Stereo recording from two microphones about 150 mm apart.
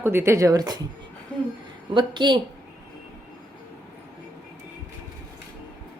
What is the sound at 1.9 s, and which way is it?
Speech, 30° right (ahead or behind).